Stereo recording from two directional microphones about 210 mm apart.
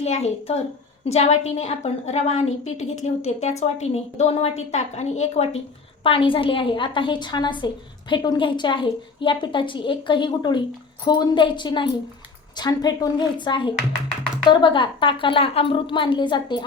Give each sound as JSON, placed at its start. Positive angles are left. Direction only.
{"t": 0.0, "sound": "a woman's voice", "side_deg": 30}